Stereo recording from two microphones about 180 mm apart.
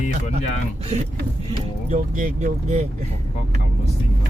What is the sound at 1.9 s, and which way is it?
Speech, 45° right (ahead or behind).